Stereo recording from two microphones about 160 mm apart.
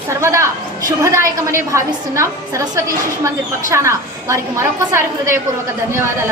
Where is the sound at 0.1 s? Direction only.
20° right (ahead or behind).